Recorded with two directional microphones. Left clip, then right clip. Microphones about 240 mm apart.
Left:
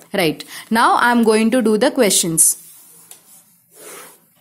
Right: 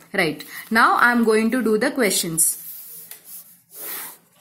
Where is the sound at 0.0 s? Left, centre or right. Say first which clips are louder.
Left 3 dB; left.